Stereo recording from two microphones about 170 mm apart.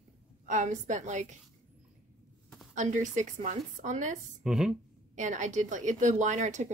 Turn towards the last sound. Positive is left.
turn(degrees=-45)  # may be behind; listen again after turning